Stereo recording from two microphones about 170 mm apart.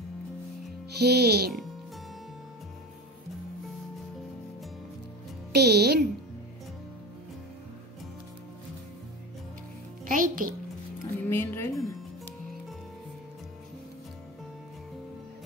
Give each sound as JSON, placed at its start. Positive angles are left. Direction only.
{"t": 0.9, "sound": "speech", "side_deg": -70}
{"t": 5.5, "sound": "speech", "side_deg": -70}
{"t": 10.0, "sound": "a child's voice", "side_deg": -55}
{"t": 11.1, "sound": "speech", "side_deg": 15}